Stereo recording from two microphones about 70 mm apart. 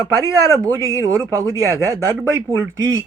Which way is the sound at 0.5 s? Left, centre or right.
Right.